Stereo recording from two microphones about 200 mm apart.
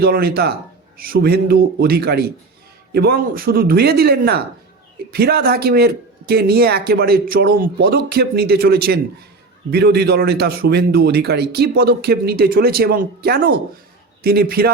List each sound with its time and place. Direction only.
0.0 s a man's voice: 50° right (ahead or behind)